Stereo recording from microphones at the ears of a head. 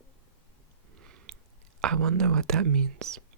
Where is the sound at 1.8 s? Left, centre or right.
Right.